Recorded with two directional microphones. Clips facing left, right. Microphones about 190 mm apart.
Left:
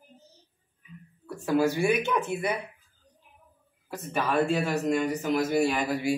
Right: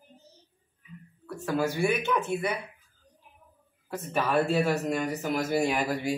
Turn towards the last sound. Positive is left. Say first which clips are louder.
# left 1 dB
turn(degrees=0)  # may be behind; listen again after turning